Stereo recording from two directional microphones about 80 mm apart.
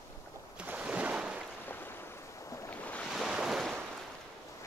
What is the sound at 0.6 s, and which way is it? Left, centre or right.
Boat, centre.